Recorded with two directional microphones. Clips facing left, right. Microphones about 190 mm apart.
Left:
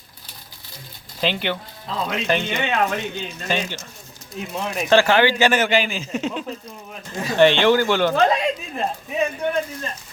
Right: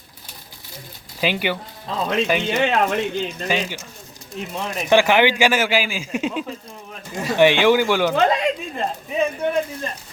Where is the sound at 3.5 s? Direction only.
10° right (ahead or behind).